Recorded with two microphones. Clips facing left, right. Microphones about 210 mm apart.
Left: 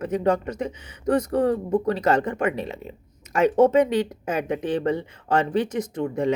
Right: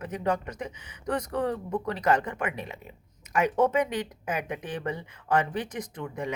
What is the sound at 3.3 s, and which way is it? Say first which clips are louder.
Speech: left 7 dB; 25° left (ahead or behind).